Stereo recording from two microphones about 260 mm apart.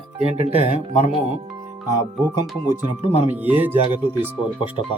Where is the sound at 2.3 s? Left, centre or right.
Centre.